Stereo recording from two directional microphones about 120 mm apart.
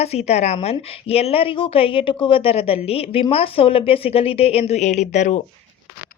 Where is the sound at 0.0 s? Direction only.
60° left (ahead or behind); by 5.4 s 80° left.